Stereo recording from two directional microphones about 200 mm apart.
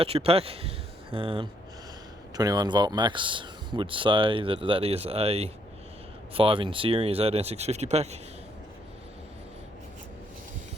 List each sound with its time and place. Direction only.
0.0 s speech: 30° right (ahead or behind)